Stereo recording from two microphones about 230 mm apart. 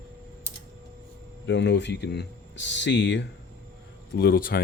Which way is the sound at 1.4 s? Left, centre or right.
Left.